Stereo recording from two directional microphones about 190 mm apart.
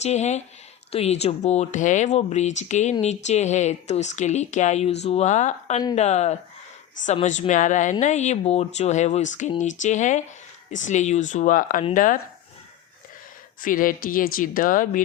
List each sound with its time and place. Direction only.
0.0 s speech: 35° left (ahead or behind)
13.6 s speech: 45° left (ahead or behind)